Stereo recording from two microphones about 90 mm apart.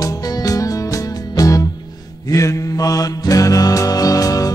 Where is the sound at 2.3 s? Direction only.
40° left (ahead or behind).